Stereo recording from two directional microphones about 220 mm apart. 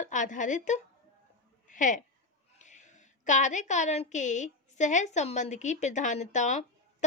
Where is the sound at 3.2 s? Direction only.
35° left (ahead or behind).